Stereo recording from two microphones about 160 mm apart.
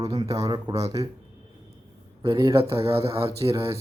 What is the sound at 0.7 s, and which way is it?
Speech, 40° right (ahead or behind).